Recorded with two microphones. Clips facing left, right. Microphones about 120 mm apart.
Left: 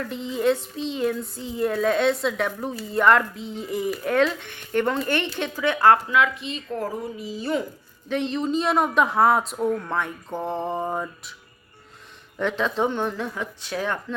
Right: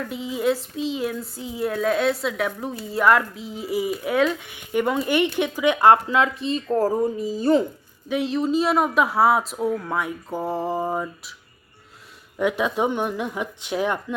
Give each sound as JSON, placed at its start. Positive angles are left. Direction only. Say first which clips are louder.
{"t": 0.0, "sound": "speech", "louder": "even", "side_deg": -5}
{"t": 6.1, "sound": "speech", "louder": "right 1 dB", "side_deg": -30}
{"t": 8.0, "sound": "speech", "louder": "right 2 dB", "side_deg": -5}
{"t": 12.4, "sound": "speech", "louder": "right 2 dB", "side_deg": -10}